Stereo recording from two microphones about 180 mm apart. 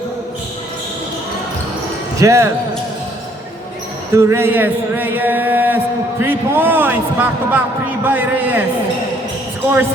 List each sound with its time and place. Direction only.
2.1 s speech: 15° right (ahead or behind)
4.1 s a sound: 15° right (ahead or behind)
8.0 s a man's voice: 10° right (ahead or behind)